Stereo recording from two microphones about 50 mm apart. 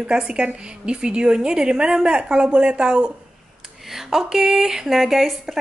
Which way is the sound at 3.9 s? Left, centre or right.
Centre.